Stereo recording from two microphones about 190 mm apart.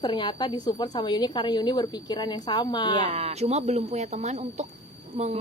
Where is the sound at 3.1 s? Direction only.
30° right (ahead or behind).